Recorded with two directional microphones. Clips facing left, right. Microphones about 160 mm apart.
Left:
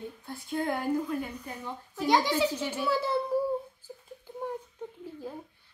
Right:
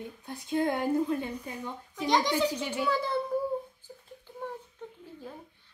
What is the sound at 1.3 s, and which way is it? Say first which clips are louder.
Speech: right 2 dB; 10° right (ahead or behind).